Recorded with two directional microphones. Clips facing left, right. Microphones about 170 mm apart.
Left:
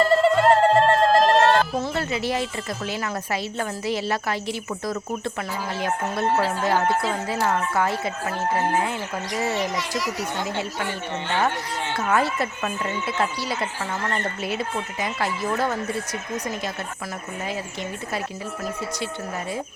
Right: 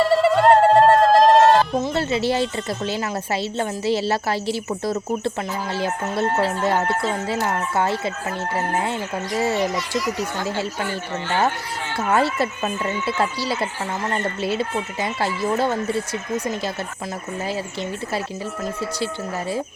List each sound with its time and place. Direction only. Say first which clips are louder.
0.0 s bird: right 2 dB; centre (ahead or behind)
1.9 s speech: right 4 dB; 30° right (ahead or behind)
10.4 s speech: right 3 dB; 30° right (ahead or behind)
11.9 s speech: right 3 dB; 30° right (ahead or behind)